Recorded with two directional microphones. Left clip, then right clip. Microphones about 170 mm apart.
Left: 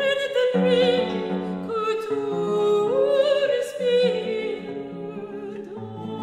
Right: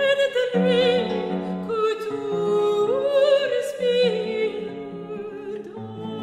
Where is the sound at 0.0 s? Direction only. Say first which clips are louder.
Right 1 dB; 35° right (ahead or behind).